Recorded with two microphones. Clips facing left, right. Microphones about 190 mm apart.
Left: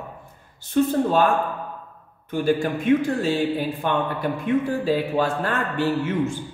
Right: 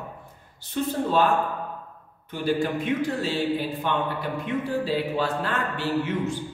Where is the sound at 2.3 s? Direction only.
50° left (ahead or behind).